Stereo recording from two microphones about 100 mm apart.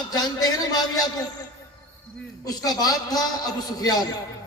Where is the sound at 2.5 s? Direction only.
40° left (ahead or behind).